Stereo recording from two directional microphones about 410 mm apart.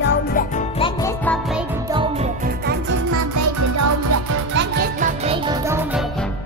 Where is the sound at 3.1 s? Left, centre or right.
Right.